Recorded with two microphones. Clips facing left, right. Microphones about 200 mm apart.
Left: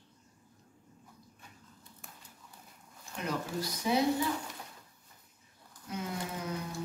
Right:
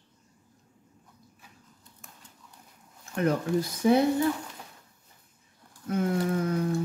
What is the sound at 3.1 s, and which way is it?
Speech, 55° right (ahead or behind).